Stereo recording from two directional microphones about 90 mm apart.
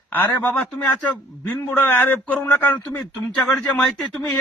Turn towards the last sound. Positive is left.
turn(degrees=10)  # may be behind; listen again after turning